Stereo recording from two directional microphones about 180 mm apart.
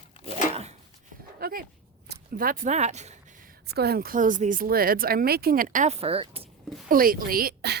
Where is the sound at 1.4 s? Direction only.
55° right (ahead or behind).